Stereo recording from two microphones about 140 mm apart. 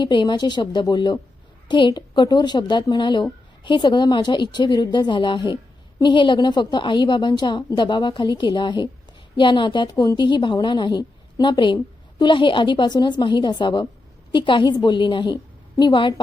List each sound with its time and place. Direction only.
0.0 s a woman's voice: 35° left (ahead or behind)